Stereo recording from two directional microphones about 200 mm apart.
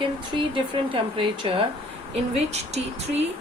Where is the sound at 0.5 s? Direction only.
25° right (ahead or behind).